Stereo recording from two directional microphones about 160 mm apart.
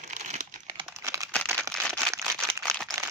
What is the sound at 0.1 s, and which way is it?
Crumpling, 50° right (ahead or behind).